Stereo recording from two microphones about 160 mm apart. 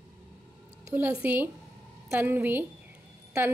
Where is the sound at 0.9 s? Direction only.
10° right (ahead or behind).